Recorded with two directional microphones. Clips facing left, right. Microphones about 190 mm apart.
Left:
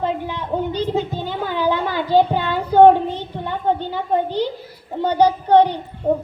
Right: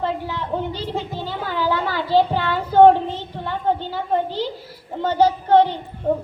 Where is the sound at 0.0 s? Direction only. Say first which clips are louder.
Left 1 dB; 15° left (ahead or behind).